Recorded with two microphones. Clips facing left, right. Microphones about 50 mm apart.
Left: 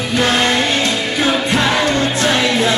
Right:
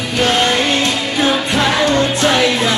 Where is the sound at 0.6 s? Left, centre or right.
Right.